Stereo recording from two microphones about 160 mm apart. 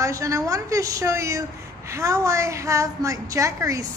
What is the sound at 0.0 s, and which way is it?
A woman's voice, 20° right (ahead or behind).